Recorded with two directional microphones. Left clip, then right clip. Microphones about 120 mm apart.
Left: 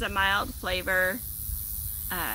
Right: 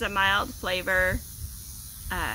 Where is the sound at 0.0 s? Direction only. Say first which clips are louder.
Right 2 dB; 15° right (ahead or behind).